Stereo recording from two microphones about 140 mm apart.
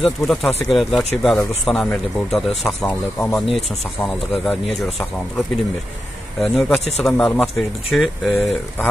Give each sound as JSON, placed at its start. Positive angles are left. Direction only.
{"t": 0.0, "sound": "speech", "side_deg": 0}
{"t": 6.4, "sound": "speech", "side_deg": 0}